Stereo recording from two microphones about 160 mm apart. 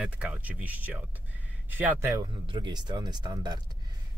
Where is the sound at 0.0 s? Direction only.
5° right (ahead or behind).